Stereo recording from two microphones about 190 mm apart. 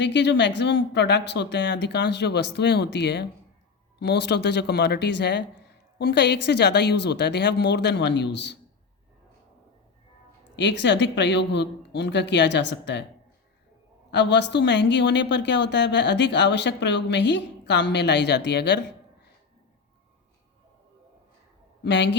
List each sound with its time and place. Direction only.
0.0 s speech: 65° left (ahead or behind)
10.6 s a woman's voice: 70° left (ahead or behind)
14.1 s a woman's voice: 65° left (ahead or behind)
21.8 s a woman's voice: 65° left (ahead or behind)